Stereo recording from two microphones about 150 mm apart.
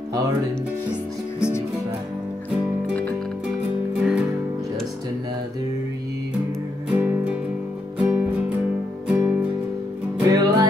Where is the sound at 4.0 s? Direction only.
Centre (ahead or behind).